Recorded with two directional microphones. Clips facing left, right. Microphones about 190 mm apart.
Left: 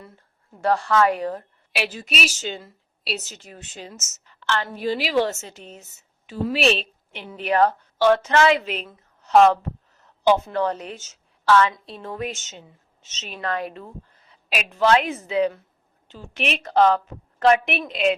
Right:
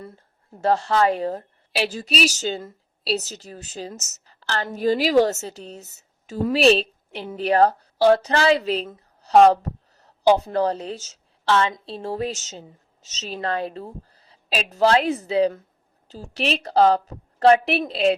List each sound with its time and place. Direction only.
0.6 s a woman's voice: 25° right (ahead or behind)